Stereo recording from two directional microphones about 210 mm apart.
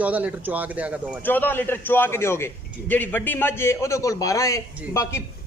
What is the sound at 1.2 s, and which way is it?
A man's voice, 10° left (ahead or behind).